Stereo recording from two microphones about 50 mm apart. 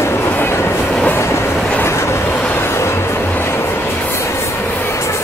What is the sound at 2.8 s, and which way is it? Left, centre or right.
Music, left.